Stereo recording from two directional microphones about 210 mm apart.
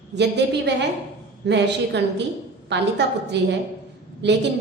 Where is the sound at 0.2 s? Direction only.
55° right (ahead or behind).